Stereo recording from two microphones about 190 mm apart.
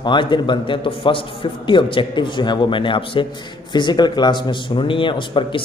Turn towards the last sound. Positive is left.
turn(degrees=25)  # may be behind; listen again after turning